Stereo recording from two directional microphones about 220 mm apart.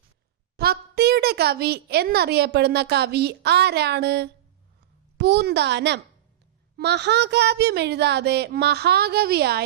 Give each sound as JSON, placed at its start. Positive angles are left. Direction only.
{"t": 0.5, "sound": "a woman's voice", "side_deg": -45}